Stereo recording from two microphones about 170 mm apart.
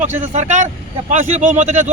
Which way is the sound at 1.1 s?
45° right (ahead or behind).